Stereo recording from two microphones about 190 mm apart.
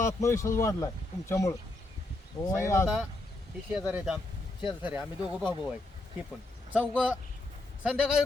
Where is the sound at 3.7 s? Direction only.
5° right (ahead or behind).